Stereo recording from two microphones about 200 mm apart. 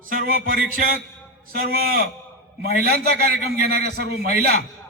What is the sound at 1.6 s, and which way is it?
A man's voice, 45° right (ahead or behind).